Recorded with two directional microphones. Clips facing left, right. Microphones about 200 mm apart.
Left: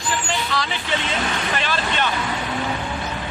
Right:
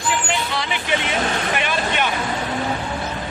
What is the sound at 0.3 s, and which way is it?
Vehicle, 20° right (ahead or behind).